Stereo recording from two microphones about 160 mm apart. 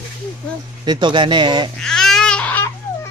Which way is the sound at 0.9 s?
30° right (ahead or behind).